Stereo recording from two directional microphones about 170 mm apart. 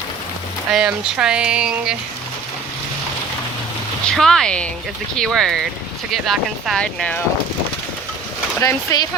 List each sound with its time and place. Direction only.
0.7 s speech: 5° right (ahead or behind)
4.1 s speech: 5° left (ahead or behind)
8.6 s speech: 20° left (ahead or behind)